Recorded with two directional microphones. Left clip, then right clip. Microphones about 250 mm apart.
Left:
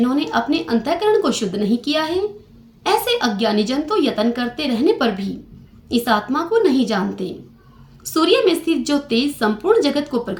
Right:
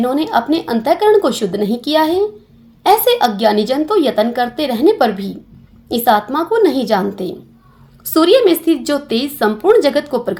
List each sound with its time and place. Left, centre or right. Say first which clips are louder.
0.0 s a woman's voice: right 4 dB; right